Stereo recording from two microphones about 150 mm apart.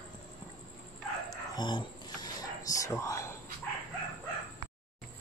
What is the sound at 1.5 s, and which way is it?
Whispering, 30° left (ahead or behind).